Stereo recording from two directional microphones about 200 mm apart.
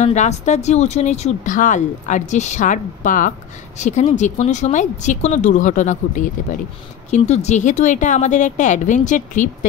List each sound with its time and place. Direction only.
0.0 s speech: 35° left (ahead or behind)